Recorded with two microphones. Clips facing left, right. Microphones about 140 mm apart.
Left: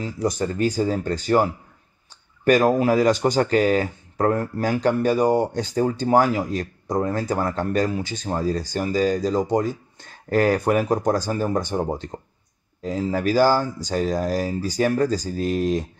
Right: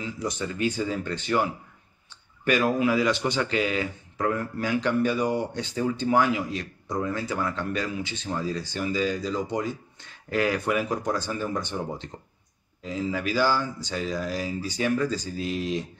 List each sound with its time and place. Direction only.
0.0 s speech: 40° left (ahead or behind)